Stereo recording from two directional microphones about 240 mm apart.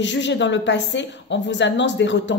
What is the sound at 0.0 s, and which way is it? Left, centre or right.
A woman's voice, left.